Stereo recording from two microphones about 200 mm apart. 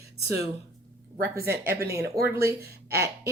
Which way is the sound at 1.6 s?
15° right (ahead or behind).